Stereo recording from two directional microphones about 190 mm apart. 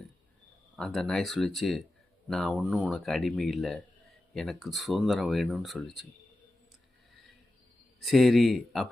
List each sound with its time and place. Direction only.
0.8 s speech: centre (ahead or behind)
8.0 s speech: centre (ahead or behind)